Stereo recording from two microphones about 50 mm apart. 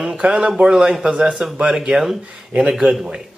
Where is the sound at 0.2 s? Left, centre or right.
Centre.